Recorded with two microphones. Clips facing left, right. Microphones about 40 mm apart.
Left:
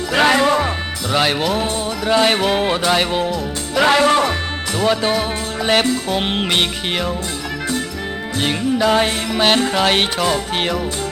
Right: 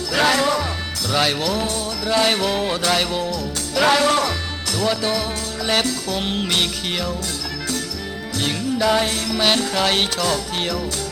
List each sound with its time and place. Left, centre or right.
0.1 s music: left
8.4 s music: left